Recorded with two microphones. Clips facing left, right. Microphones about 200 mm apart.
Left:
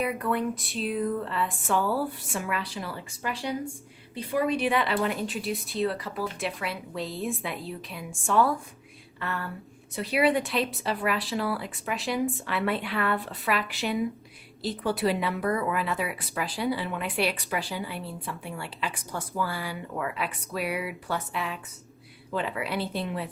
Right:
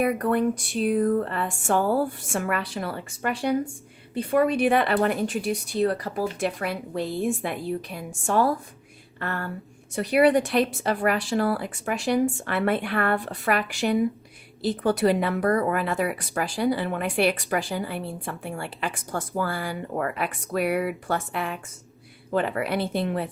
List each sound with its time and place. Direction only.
0.0 s speech: 45° right (ahead or behind)
15.0 s speech: 50° right (ahead or behind)